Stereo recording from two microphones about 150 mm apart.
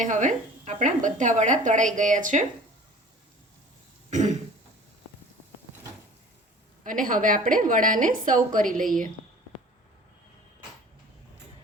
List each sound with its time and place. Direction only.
0.0 s a woman's voice: 55° right (ahead or behind)
4.1 s throat clearing: 50° right (ahead or behind)
6.8 s a woman's voice: 65° right (ahead or behind)